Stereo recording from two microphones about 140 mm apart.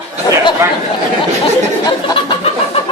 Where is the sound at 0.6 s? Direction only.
20° right (ahead or behind).